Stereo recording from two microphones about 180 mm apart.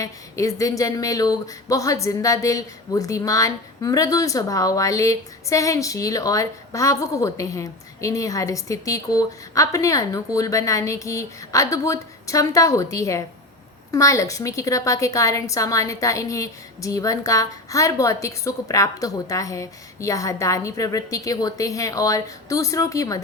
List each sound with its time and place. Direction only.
0.0 s speech: 15° left (ahead or behind)